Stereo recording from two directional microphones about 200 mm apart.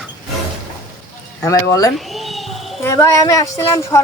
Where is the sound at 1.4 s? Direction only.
15° left (ahead or behind).